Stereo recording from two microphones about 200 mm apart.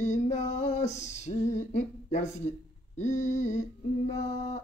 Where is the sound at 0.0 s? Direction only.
35° left (ahead or behind).